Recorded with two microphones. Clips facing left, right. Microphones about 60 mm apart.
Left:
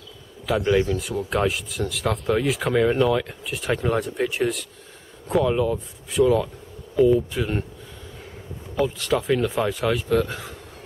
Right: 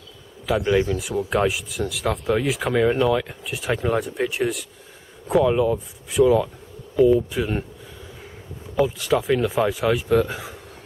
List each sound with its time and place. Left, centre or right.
0.5 s speech: centre
8.7 s speech: centre